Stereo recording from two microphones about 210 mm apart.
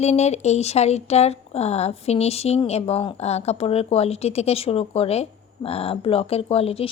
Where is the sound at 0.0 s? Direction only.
30° left (ahead or behind).